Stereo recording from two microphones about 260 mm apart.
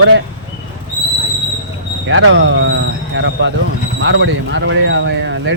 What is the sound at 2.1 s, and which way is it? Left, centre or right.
Speech, right.